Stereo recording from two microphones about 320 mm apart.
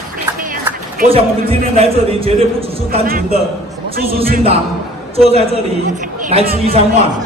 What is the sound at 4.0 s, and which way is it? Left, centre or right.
Speech, right.